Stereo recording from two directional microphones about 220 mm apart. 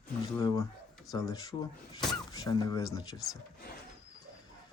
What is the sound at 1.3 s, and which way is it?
Speech, 15° left (ahead or behind).